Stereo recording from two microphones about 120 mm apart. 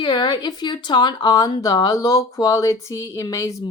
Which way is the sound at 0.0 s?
40° left (ahead or behind).